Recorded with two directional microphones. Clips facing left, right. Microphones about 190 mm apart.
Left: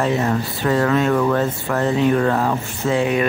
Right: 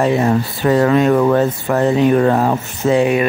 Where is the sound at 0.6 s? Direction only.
15° right (ahead or behind).